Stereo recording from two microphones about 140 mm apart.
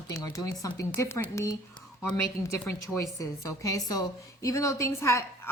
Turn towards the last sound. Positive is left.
turn(degrees=20)  # may be behind; listen again after turning